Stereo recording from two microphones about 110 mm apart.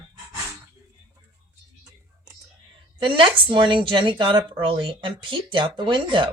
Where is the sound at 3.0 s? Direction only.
50° right (ahead or behind).